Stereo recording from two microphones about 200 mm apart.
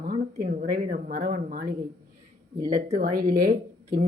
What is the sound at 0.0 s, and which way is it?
Speech, 45° right (ahead or behind).